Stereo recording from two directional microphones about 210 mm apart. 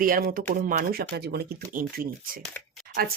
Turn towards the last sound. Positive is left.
turn(degrees=-45)  # may be behind; listen again after turning